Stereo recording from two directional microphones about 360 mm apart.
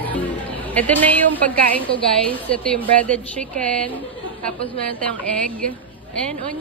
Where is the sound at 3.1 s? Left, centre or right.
Centre.